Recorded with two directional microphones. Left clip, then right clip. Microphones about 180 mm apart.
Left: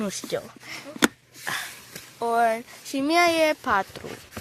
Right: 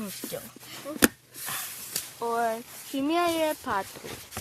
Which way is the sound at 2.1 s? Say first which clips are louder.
Left 6 dB; 30° left (ahead or behind).